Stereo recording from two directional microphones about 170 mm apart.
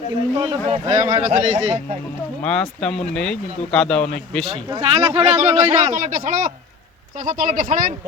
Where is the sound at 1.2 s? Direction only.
45° right (ahead or behind).